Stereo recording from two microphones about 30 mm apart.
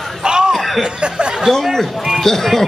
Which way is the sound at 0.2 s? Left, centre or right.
Right.